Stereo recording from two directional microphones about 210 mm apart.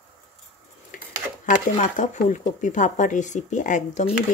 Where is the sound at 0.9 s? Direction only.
40° left (ahead or behind).